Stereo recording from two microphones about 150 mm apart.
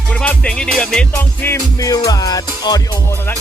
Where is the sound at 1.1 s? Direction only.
15° left (ahead or behind).